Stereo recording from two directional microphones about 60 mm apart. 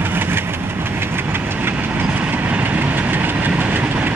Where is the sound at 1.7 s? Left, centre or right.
Right.